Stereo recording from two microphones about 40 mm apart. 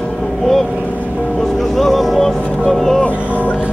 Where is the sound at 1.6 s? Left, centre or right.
Centre.